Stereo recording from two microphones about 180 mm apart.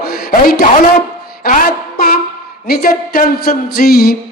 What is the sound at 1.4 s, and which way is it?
Music, 50° left (ahead or behind).